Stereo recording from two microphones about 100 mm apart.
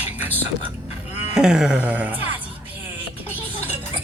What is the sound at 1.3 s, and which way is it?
Speech, 5° right (ahead or behind).